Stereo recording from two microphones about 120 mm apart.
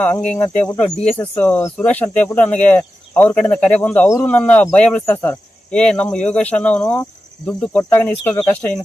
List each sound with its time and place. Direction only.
0.3 s speech: 15° left (ahead or behind)